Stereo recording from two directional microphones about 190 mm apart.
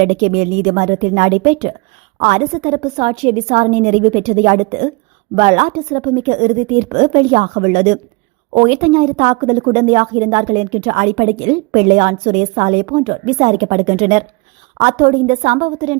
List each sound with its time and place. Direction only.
0.0 s a woman's voice: 40° right (ahead or behind)